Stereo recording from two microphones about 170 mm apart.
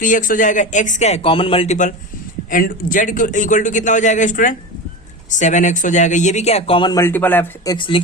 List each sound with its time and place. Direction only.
0.0 s a man's voice: 50° left (ahead or behind)
2.5 s a man's voice: 55° left (ahead or behind); by 7.0 s 30° left (ahead or behind)
7.0 s speech: 10° left (ahead or behind)
7.7 s speech: 30° left (ahead or behind)